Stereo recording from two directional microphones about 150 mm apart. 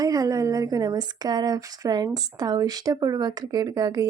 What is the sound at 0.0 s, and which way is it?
Speech, 25° right (ahead or behind).